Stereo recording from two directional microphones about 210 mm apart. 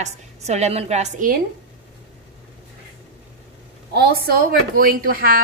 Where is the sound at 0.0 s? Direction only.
30° right (ahead or behind).